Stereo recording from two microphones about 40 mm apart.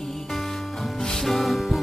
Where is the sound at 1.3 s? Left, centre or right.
Centre.